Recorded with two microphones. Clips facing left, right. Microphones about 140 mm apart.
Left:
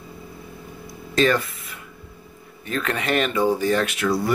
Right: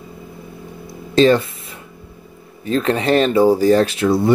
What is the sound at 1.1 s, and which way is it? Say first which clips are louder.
Speech: right 7 dB; 30° right (ahead or behind).